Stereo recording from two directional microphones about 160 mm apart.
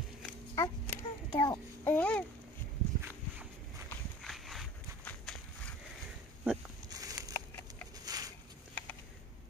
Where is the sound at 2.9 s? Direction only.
15° right (ahead or behind).